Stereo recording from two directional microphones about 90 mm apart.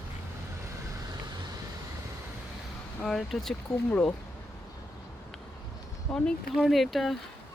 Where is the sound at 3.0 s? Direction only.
5° left (ahead or behind).